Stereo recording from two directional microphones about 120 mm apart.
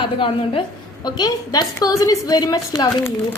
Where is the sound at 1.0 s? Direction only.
35° left (ahead or behind).